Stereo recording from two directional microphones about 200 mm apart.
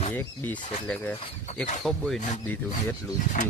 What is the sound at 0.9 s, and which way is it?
Speech, 10° left (ahead or behind).